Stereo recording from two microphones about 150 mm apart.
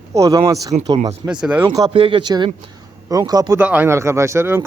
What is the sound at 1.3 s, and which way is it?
Speech, 5° right (ahead or behind).